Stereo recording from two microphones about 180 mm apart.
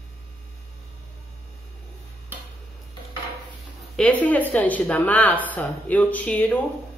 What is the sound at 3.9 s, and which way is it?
A woman's voice, 5° left (ahead or behind).